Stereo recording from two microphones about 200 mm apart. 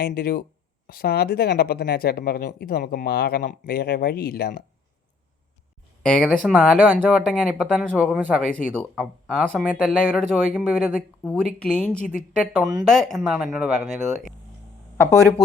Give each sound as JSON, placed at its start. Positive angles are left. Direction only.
{"t": 0.0, "sound": "speech", "side_deg": 50}
{"t": 6.0, "sound": "speech", "side_deg": 5}